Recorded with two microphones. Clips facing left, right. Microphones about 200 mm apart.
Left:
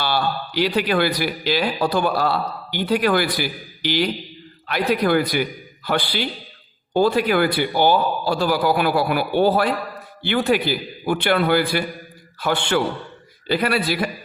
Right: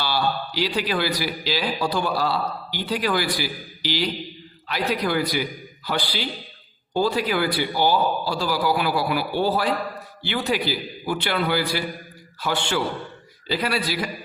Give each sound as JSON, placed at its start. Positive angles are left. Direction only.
{"t": 0.0, "sound": "a man's voice", "side_deg": 55}